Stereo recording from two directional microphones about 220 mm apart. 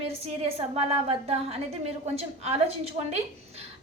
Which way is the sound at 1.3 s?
25° right (ahead or behind).